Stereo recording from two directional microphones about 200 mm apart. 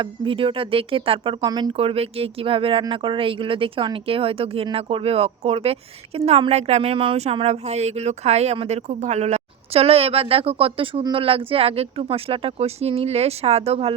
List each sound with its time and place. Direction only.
0.0 s speech: 25° right (ahead or behind)